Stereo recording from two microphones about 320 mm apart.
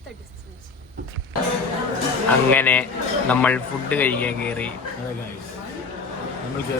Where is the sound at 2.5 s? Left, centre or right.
Centre.